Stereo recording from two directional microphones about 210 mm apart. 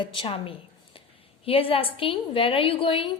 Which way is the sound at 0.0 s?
25° left (ahead or behind).